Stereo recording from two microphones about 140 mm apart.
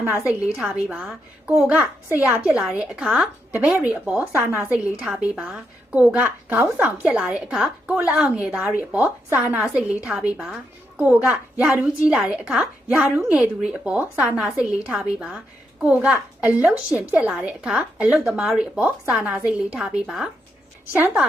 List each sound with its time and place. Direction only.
0.3 s a woman's voice: 5° right (ahead or behind)
4.9 s a woman's voice: 5° right (ahead or behind)